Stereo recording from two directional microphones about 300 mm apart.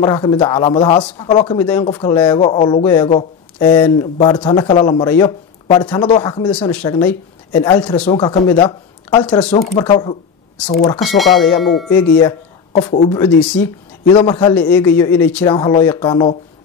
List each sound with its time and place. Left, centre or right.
0.0 s speech: centre
11.0 s speech: centre